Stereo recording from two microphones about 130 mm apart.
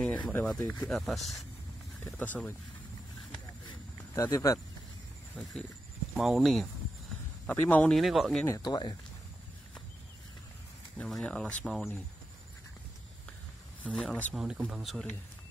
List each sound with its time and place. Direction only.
0.3 s speech: 15° left (ahead or behind)
0.9 s speech: centre (ahead or behind)
2.1 s speech: 10° left (ahead or behind)
4.1 s speech: 25° left (ahead or behind)
5.3 s speech: 5° left (ahead or behind)
7.4 s speech: 15° left (ahead or behind)
7.9 s speech: centre (ahead or behind)
8.6 s speech: 35° left (ahead or behind)
11.0 s speech: 5° left (ahead or behind)
13.9 s speech: 5° left (ahead or behind)